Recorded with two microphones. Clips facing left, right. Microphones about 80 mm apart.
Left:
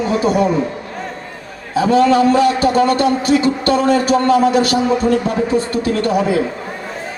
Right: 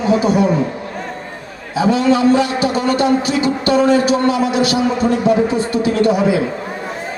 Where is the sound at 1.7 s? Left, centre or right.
Left.